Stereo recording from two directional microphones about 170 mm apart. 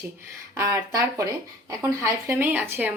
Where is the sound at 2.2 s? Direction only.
10° right (ahead or behind).